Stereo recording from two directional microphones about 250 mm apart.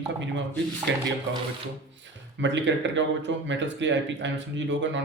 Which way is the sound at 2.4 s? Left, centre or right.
Right.